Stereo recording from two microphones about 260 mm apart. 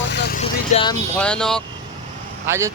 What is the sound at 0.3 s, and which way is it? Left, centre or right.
Vehicle, left.